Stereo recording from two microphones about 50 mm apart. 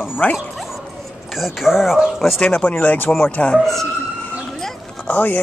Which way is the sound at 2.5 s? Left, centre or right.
Left.